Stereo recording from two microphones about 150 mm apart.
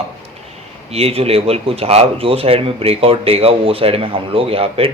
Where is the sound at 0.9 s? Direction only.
45° right (ahead or behind).